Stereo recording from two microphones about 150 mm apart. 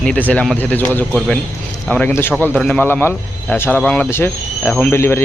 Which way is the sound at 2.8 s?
15° left (ahead or behind).